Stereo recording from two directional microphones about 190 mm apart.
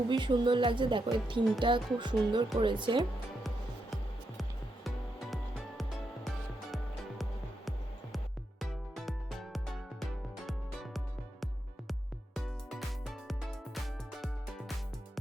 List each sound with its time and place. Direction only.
0.1 s speech: 25° right (ahead or behind)
4.4 s music: centre (ahead or behind)
8.1 s music: centre (ahead or behind)